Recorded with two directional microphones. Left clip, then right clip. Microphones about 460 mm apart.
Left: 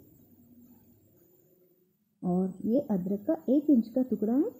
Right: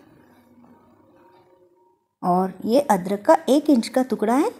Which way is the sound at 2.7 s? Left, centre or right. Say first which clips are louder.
Right 12 dB; right.